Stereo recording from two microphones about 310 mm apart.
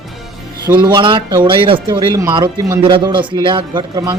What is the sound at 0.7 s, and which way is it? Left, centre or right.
Speech, centre.